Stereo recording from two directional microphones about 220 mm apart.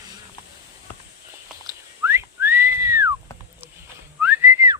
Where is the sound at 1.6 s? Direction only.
10° right (ahead or behind).